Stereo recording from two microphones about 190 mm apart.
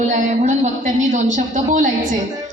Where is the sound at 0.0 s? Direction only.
40° right (ahead or behind).